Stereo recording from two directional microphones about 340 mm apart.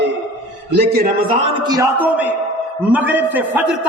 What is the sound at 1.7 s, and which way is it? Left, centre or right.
A man's voice, centre.